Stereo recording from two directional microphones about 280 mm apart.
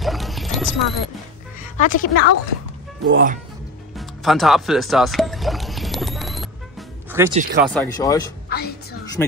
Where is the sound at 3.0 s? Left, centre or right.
Right.